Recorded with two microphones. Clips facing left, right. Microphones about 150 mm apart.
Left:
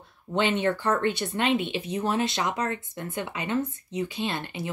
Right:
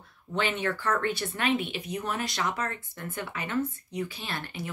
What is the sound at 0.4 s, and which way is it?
Speech, 25° left (ahead or behind).